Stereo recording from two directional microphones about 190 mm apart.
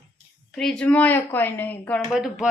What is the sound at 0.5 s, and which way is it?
A woman's voice, 5° left (ahead or behind).